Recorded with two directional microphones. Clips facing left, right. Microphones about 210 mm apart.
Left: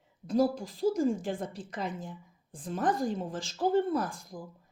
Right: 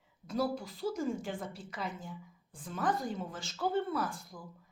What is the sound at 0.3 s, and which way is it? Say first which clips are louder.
A woman's voice: left 6 dB; 40° left (ahead or behind).